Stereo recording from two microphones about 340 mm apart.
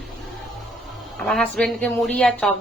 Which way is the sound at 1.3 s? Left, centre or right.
Centre.